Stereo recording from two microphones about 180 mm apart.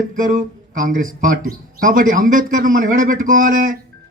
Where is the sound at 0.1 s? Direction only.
45° right (ahead or behind).